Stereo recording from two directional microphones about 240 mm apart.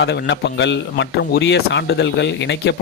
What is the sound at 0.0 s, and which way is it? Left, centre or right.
Speech, left.